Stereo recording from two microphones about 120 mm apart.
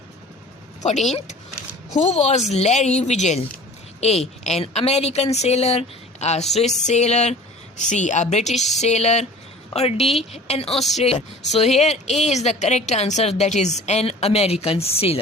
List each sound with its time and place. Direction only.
0.8 s a woman's voice: 80° left
7.8 s a woman's voice: 85° left
9.7 s a woman's voice: 60° left (ahead or behind)
10.7 s speech: centre (ahead or behind)
10.9 s speech: 60° left (ahead or behind)